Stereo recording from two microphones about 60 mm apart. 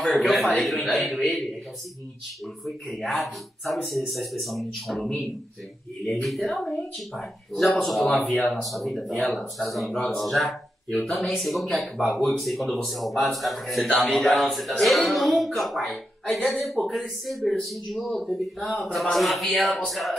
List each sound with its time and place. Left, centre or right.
0.0 s speech: centre
6.2 s speech: centre